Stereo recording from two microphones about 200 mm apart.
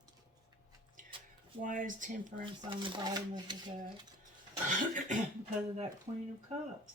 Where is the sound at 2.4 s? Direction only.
25° right (ahead or behind).